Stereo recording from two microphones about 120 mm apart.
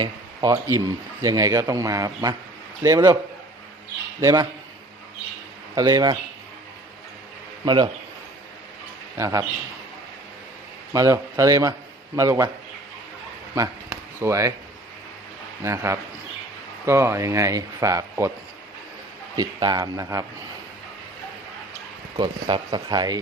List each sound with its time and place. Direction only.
0.4 s speech: 25° right (ahead or behind)
4.2 s speech: 30° right (ahead or behind)
5.7 s speech: 35° right (ahead or behind)
7.6 s speech: 40° right (ahead or behind)
9.1 s speech: 25° right (ahead or behind)
10.9 s speech: 25° right (ahead or behind)
13.6 s speech: 25° right (ahead or behind)
15.6 s speech: 25° right (ahead or behind)
19.4 s speech: 35° right (ahead or behind)
22.2 s speech: 45° right (ahead or behind)